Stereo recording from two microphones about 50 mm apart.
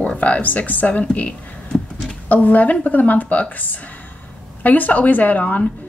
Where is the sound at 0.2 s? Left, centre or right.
Left.